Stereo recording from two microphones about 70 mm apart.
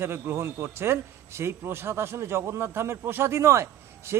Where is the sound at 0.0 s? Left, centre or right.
Right.